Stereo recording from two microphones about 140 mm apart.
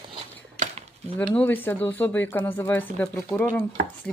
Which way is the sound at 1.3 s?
10° left (ahead or behind).